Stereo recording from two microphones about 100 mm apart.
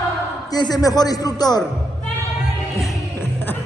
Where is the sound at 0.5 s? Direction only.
40° left (ahead or behind).